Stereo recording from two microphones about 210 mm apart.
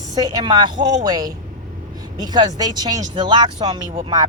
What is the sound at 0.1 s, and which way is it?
A woman's voice, 20° right (ahead or behind).